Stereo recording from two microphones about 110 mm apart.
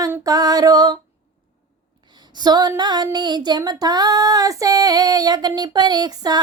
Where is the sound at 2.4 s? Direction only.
40° right (ahead or behind).